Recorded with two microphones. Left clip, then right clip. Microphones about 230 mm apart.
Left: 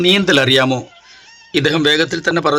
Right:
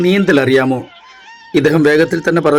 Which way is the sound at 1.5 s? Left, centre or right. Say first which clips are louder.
Right 3 dB; centre.